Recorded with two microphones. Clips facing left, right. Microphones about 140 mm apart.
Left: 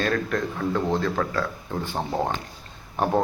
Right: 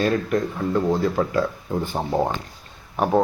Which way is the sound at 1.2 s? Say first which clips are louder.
Right 4 dB; 25° right (ahead or behind).